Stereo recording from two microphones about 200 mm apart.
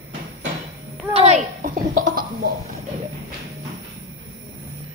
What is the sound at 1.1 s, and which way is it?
A child's voice, 30° right (ahead or behind).